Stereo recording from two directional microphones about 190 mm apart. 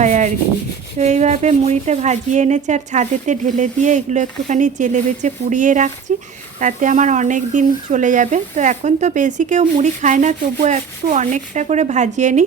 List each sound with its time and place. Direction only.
0.0 s rub: 40° right (ahead or behind)
0.9 s speech: 35° right (ahead or behind)